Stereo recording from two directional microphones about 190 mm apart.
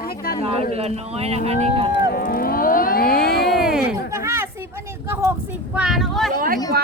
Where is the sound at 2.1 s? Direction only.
50° left (ahead or behind).